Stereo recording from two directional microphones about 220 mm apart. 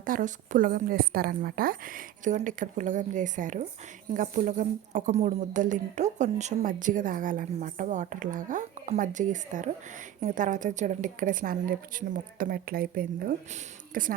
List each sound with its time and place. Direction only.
0.0 s speech: 35° right (ahead or behind)